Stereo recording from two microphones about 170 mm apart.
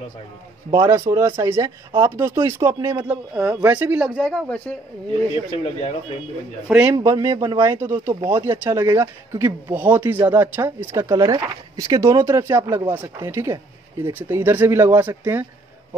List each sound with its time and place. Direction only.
0.7 s speech: 20° right (ahead or behind)
3.1 s speech: 5° right (ahead or behind)
4.2 s speech: 5° left (ahead or behind)
5.5 s speech: 40° left (ahead or behind)
6.7 s speech: 10° right (ahead or behind)
7.0 s speech: 20° right (ahead or behind)